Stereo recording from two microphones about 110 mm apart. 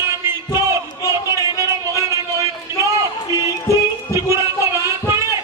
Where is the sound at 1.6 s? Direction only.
25° right (ahead or behind).